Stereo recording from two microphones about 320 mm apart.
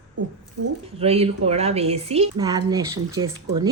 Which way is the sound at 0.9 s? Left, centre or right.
Centre.